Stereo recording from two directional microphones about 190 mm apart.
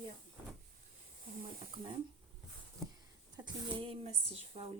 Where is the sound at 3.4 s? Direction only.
25° right (ahead or behind).